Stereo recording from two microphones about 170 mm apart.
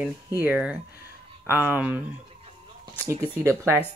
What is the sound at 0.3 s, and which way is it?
Speech, 15° right (ahead or behind).